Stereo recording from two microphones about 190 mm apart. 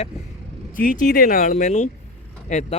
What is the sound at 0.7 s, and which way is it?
Speech, 45° left (ahead or behind).